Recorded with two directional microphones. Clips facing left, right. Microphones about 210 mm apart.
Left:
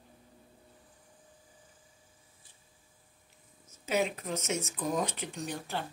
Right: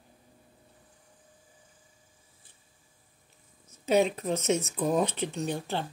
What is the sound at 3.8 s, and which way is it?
Speech, 30° right (ahead or behind).